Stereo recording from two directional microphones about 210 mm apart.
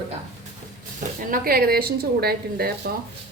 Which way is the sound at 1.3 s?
45° right (ahead or behind).